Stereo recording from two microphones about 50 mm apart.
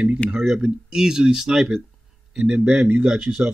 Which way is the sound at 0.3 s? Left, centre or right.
Centre.